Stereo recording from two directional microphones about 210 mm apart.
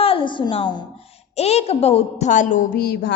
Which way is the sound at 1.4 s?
30° left (ahead or behind).